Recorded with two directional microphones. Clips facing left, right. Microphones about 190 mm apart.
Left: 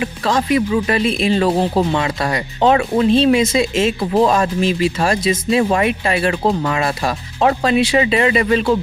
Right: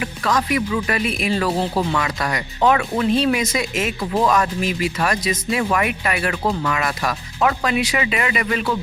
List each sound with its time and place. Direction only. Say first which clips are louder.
0.0 s speech: left 3 dB; 25° left (ahead or behind)